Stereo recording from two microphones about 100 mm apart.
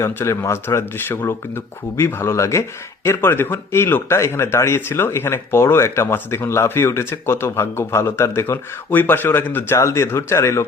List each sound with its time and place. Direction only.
0.0 s speech: 25° left (ahead or behind)